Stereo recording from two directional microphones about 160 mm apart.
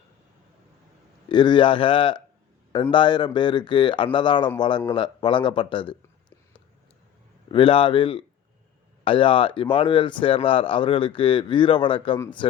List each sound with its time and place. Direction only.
1.3 s speech: 30° left (ahead or behind)
7.5 s speech: 35° left (ahead or behind)